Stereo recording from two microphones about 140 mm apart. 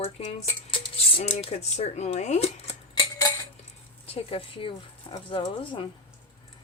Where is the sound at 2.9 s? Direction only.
30° left (ahead or behind).